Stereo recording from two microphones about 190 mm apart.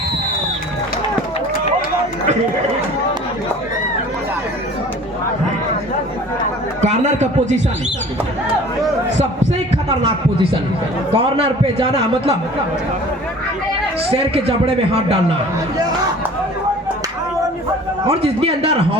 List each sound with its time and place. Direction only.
6.8 s speech: 35° right (ahead or behind)
9.1 s a man's voice: 30° right (ahead or behind)
14.1 s speech: 30° right (ahead or behind)
18.1 s speech: 30° right (ahead or behind)